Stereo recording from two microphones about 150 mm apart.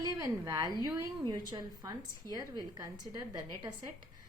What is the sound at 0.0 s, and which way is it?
A woman's voice, 25° right (ahead or behind).